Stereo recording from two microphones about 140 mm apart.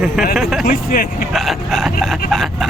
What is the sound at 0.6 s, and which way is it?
Speech, 90° left.